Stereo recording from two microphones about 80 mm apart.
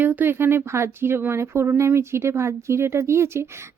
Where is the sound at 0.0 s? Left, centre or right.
Right.